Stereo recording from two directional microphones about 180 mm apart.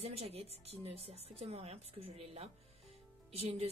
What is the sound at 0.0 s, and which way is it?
Speech, 35° right (ahead or behind).